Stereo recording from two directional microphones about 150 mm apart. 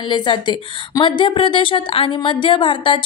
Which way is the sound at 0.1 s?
30° left (ahead or behind).